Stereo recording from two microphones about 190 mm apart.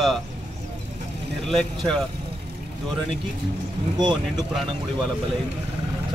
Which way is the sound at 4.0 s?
20° right (ahead or behind).